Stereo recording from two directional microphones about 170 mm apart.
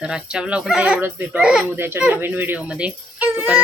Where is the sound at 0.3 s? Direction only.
5° right (ahead or behind).